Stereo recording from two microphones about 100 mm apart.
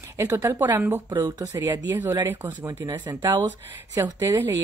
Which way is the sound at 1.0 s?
40° right (ahead or behind).